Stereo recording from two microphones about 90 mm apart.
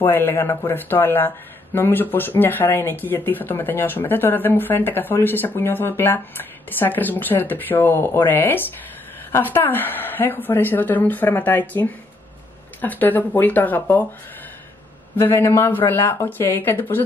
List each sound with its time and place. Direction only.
0.0 s speech: 25° left (ahead or behind)
15.1 s speech: 30° left (ahead or behind)